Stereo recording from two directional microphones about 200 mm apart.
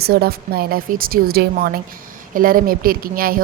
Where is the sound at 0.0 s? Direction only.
50° right (ahead or behind).